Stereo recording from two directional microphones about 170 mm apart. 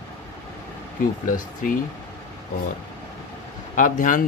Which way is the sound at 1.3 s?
55° left (ahead or behind).